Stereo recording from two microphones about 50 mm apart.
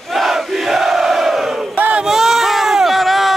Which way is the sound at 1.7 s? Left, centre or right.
Right.